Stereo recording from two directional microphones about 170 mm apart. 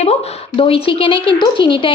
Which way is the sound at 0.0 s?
40° left (ahead or behind).